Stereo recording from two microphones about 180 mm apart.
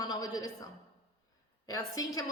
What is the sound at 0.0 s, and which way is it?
A woman's voice, 20° left (ahead or behind).